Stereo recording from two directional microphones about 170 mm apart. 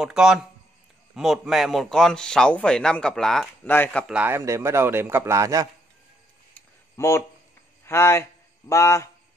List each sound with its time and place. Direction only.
0.0 s a man's voice: 5° right (ahead or behind)
4.1 s speech: 10° right (ahead or behind)
7.0 s speech: 15° left (ahead or behind)